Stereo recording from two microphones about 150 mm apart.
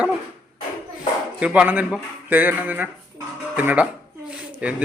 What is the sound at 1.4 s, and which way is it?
A child's voice, 10° right (ahead or behind).